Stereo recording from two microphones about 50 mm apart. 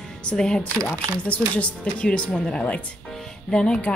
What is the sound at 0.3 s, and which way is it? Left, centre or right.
Speech, centre.